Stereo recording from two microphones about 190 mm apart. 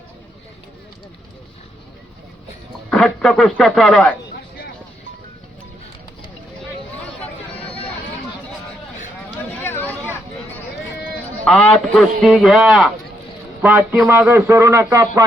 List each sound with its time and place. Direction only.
2.9 s a man's voice: centre (ahead or behind)
9.6 s a sound: 10° left (ahead or behind)
11.4 s a man's voice: 5° left (ahead or behind); by 15.2 s 15° right (ahead or behind)